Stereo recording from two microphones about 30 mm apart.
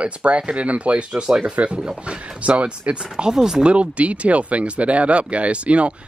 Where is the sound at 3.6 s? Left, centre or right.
Right.